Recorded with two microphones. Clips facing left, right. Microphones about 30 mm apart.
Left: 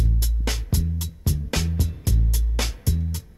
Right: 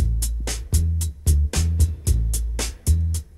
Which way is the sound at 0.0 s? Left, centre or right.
Centre.